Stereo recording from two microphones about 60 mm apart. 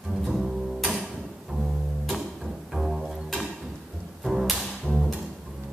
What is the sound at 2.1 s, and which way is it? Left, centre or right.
Cello, centre.